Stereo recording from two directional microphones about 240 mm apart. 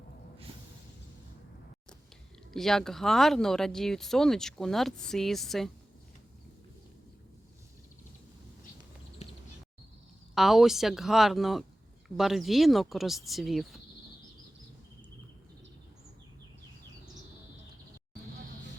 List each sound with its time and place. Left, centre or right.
2.5 s speech: centre
9.2 s bird: left
10.3 s speech: centre